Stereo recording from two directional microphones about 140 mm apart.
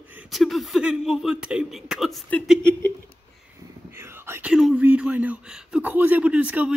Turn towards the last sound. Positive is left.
turn(degrees=-10)  # may be behind; listen again after turning